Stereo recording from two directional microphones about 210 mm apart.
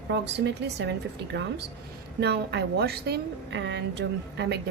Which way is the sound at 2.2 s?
50° right (ahead or behind).